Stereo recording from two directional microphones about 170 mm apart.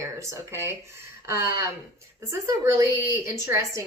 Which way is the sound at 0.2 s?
15° right (ahead or behind).